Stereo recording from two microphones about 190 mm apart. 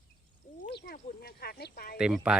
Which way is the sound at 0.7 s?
55° left (ahead or behind).